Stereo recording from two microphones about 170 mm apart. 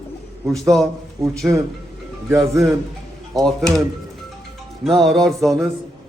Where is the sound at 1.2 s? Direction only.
15° right (ahead or behind).